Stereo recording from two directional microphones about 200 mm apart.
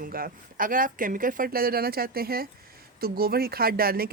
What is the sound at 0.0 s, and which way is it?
Speech, 45° right (ahead or behind).